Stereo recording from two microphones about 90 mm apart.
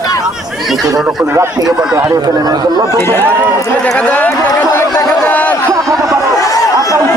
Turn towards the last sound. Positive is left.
turn(degrees=40)  # may be behind; listen again after turning